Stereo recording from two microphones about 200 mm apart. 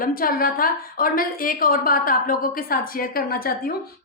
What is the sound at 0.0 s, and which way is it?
A woman's voice, 45° left (ahead or behind).